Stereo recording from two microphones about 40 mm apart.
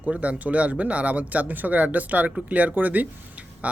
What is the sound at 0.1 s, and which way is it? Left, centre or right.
Speech, right.